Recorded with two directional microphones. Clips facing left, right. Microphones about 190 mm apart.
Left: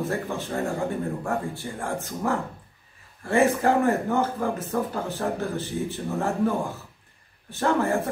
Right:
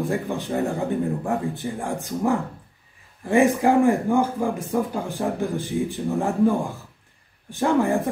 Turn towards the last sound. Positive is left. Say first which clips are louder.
# right 3 dB
turn(degrees=-15)  # may be behind; listen again after turning